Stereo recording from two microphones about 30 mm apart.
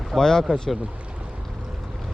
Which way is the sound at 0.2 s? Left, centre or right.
Centre.